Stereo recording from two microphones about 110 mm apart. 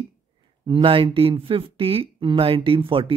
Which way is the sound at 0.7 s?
55° right (ahead or behind).